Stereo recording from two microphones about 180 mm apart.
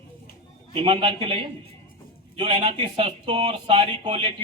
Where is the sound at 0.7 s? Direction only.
30° right (ahead or behind).